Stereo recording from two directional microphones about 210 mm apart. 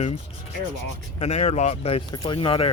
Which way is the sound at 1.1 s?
30° left (ahead or behind).